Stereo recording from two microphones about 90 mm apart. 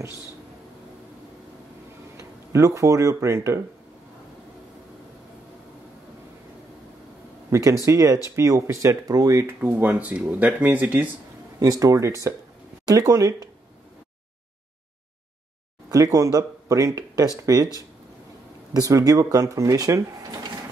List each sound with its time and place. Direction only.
2.1 s speech: 35° right (ahead or behind)
7.5 s speech: 35° right (ahead or behind)
9.5 s speech: 25° right (ahead or behind)
11.6 s speech: 40° right (ahead or behind)
15.9 s speech: 40° right (ahead or behind)
18.7 s speech: 40° right (ahead or behind)